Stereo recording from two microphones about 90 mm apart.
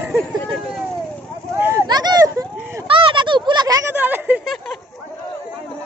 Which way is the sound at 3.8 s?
20° right (ahead or behind).